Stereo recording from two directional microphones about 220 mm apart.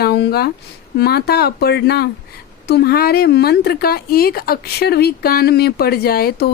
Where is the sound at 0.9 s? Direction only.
45° left (ahead or behind).